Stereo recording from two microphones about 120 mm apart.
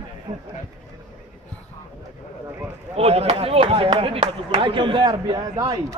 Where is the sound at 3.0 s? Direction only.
60° right (ahead or behind); by 5.9 s 30° right (ahead or behind).